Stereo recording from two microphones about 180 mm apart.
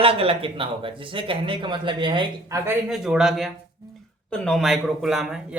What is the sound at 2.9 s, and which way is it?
Speech, centre (ahead or behind).